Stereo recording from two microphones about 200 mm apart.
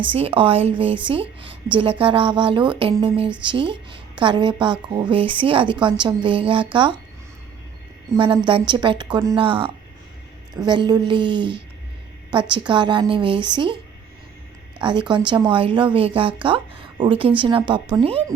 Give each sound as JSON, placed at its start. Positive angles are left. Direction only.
{"t": 0.1, "sound": "speech", "side_deg": -25}
{"t": 8.1, "sound": "speech", "side_deg": -25}
{"t": 14.8, "sound": "speech", "side_deg": -25}